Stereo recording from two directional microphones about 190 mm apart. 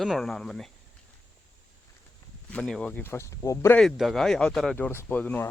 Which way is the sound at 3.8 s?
Centre (ahead or behind).